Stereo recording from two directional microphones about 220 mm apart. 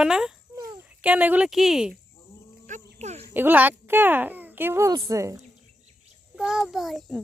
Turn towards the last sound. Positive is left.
turn(degrees=0)  # may be behind; listen again after turning